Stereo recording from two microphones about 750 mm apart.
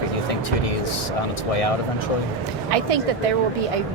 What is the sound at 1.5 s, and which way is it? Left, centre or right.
Speech, left.